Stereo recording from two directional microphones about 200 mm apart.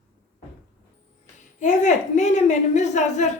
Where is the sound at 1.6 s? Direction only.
35° left (ahead or behind).